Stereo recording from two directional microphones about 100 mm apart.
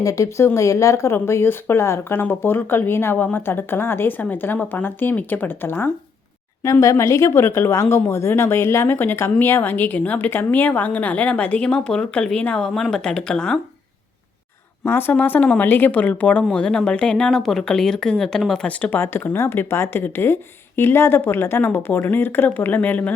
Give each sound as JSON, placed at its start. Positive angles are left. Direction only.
{"t": 0.0, "sound": "speech", "side_deg": 35}
{"t": 6.6, "sound": "speech", "side_deg": 30}
{"t": 14.8, "sound": "speech", "side_deg": 20}